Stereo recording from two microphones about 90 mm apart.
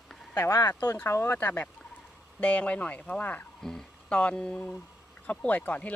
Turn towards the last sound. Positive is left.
turn(degrees=15)  # may be behind; listen again after turning